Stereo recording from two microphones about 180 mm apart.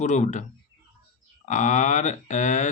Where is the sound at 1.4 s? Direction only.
45° left (ahead or behind).